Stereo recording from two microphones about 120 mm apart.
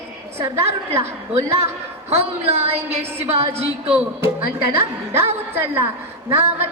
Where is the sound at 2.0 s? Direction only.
55° right (ahead or behind).